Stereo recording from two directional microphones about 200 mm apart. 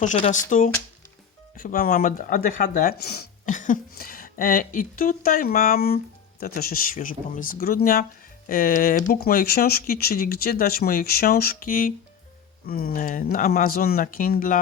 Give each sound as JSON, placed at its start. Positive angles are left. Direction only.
{"t": 0.0, "sound": "speech", "side_deg": 40}
{"t": 1.5, "sound": "speech", "side_deg": 45}